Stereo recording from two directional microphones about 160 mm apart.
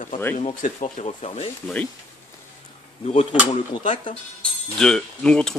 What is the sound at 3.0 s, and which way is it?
A man's voice, 45° left (ahead or behind).